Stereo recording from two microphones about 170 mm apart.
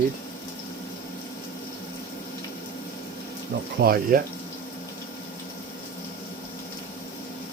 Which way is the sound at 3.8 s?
55° right (ahead or behind).